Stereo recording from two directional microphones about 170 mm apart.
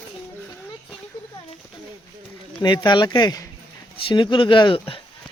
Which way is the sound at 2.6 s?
25° left (ahead or behind).